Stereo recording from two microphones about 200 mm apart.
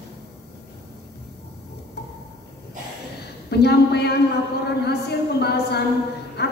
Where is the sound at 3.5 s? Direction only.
55° left (ahead or behind).